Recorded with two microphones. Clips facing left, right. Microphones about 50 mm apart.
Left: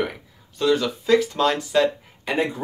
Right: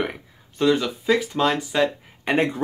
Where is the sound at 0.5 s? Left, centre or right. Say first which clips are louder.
Even; right.